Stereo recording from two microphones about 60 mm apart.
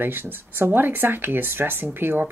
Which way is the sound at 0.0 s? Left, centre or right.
Right.